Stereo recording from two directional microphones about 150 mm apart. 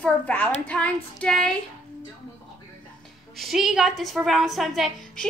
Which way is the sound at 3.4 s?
Centre (ahead or behind).